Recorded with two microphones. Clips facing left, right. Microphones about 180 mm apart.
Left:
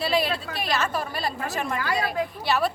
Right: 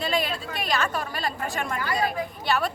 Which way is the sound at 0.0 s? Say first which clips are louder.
Left 2 dB; centre (ahead or behind).